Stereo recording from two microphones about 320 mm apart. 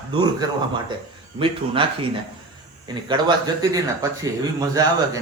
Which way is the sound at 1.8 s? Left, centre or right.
Centre.